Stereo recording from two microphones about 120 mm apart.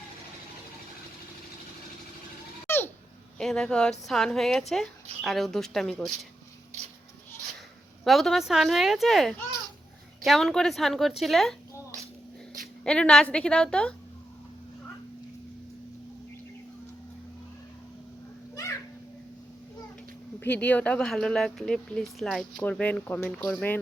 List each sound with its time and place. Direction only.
2.6 s a sound: 20° left (ahead or behind)
3.3 s speech: 5° left (ahead or behind)
8.0 s speech: centre (ahead or behind)
12.8 s a woman's voice: 5° left (ahead or behind)
20.4 s a woman's voice: 15° left (ahead or behind)
22.5 s a woman's voice: 10° left (ahead or behind)